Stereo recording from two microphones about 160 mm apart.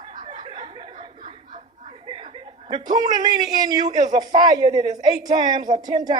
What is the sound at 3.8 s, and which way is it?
Speech, 50° right (ahead or behind).